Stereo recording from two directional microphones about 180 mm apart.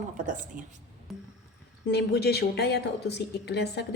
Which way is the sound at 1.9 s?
65° left (ahead or behind).